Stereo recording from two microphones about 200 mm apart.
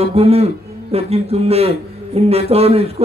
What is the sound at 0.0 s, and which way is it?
A man's voice, 30° right (ahead or behind).